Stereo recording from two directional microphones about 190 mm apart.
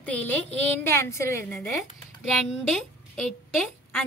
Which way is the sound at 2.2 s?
Centre (ahead or behind).